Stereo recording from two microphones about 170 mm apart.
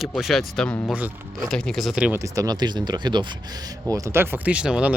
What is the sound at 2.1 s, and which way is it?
Speech, 20° right (ahead or behind).